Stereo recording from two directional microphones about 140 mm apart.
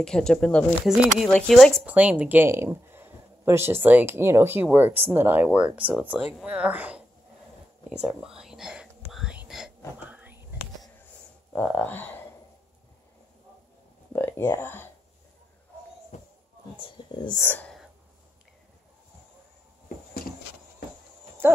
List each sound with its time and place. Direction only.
0.0 s speech: 5° left (ahead or behind)
1.9 s speech: 10° right (ahead or behind)
7.9 s whispering: 5° right (ahead or behind)
10.0 s a sound: 10° right (ahead or behind)
11.5 s speech: 10° left (ahead or behind)
14.1 s a sound: 15° left (ahead or behind)
16.1 s a sound: 60° left (ahead or behind)
16.7 s speech: 35° left (ahead or behind)
17.4 s speech: 15° left (ahead or behind)